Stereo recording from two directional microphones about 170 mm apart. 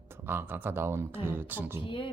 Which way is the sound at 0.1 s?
10° right (ahead or behind).